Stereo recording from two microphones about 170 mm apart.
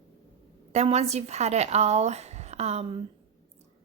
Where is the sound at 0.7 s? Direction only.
40° right (ahead or behind).